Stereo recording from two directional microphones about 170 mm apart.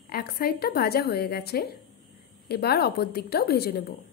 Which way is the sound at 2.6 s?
70° left (ahead or behind).